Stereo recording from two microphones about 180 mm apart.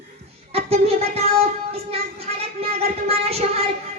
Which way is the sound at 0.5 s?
35° right (ahead or behind).